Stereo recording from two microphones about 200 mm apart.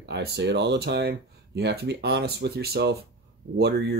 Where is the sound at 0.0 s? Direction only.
55° right (ahead or behind).